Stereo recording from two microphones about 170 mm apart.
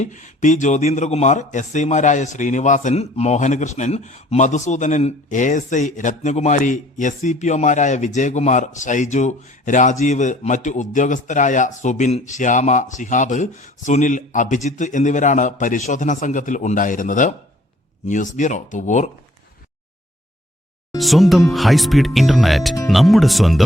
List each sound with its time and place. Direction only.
0.0 s speech: 45° left (ahead or behind)
21.0 s speech: centre (ahead or behind)